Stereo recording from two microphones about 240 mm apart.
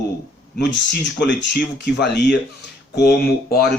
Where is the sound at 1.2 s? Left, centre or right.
Left.